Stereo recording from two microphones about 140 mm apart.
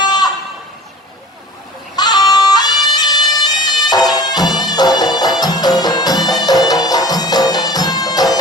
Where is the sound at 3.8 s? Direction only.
30° left (ahead or behind).